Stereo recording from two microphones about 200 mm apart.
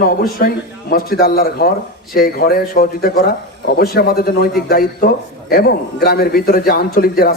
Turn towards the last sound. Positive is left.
turn(degrees=50)  # may be behind; listen again after turning